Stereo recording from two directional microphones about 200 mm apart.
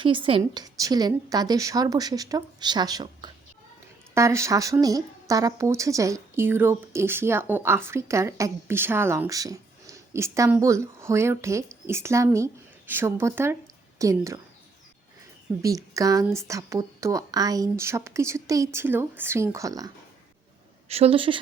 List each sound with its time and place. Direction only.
0.0 s a woman's voice: 25° right (ahead or behind)
15.6 s speech: 15° right (ahead or behind)
20.8 s a woman's voice: 30° right (ahead or behind)